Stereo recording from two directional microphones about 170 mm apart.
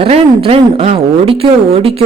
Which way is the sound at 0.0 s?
35° right (ahead or behind).